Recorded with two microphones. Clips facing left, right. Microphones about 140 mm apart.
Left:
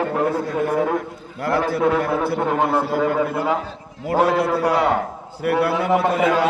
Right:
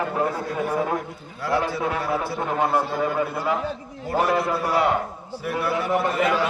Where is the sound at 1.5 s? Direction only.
65° left (ahead or behind); by 6.4 s 80° left.